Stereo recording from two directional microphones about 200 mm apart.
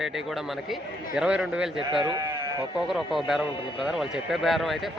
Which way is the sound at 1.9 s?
20° right (ahead or behind).